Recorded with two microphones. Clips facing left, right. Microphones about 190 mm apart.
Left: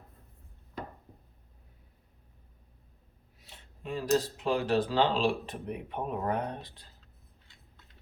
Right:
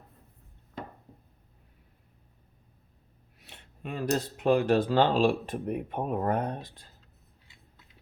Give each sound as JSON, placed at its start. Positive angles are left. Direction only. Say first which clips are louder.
{"t": 3.4, "sound": "speech", "louder": "right 1 dB", "side_deg": -65}